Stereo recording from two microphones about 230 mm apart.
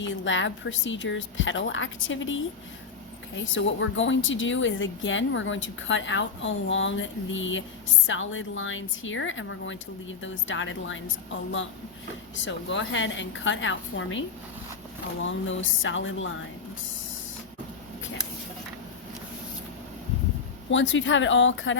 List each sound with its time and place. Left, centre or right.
0.0 s a woman's voice: left
3.5 s a woman's voice: left
12.5 s a woman's voice: left
20.7 s a woman's voice: left